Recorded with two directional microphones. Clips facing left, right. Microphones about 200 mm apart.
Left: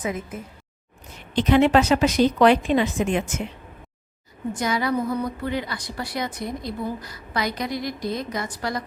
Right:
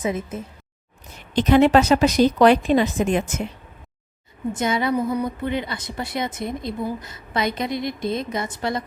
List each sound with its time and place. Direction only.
0.0 s a woman's voice: 25° right (ahead or behind)
1.4 s a woman's voice: 40° right (ahead or behind)
4.5 s a woman's voice: 25° right (ahead or behind)